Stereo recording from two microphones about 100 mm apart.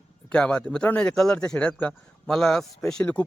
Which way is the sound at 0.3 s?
10° left (ahead or behind).